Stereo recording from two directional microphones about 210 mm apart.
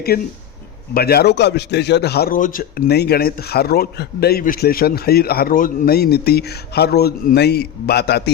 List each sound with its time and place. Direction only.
0.1 s a man's voice: 45° left (ahead or behind)